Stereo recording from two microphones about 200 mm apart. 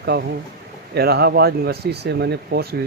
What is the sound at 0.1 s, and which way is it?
Speech, 50° right (ahead or behind).